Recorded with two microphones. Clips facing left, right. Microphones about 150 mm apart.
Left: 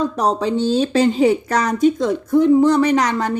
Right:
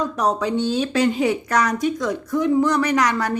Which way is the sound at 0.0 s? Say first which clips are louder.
Left 3 dB; 30° left (ahead or behind).